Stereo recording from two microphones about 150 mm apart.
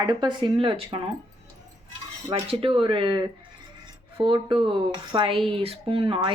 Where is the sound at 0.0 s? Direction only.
30° right (ahead or behind).